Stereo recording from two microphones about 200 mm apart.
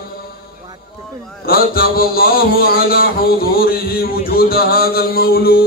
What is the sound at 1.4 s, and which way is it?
A man's voice, 50° left (ahead or behind).